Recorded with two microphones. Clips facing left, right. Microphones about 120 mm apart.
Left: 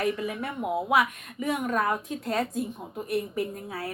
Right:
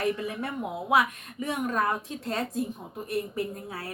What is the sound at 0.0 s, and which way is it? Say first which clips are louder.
A woman's voice: left 1 dB; 30° right (ahead or behind).